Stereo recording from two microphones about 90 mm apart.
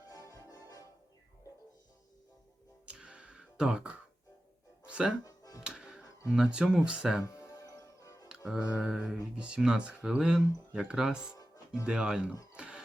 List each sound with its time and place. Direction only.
0.1 s music: 40° left (ahead or behind)
2.8 s music: 10° right (ahead or behind)
5.2 s music: 40° left (ahead or behind)
5.6 s music: 10° right (ahead or behind)
6.3 s speech: 10° right (ahead or behind)
7.3 s music: 35° left (ahead or behind)
8.4 s speech: 10° right (ahead or behind)
12.5 s a sound: 10° right (ahead or behind)